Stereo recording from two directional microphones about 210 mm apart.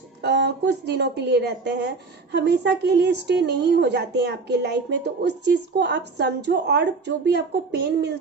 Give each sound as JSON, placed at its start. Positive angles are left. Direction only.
{"t": 0.2, "sound": "a woman's voice", "side_deg": -50}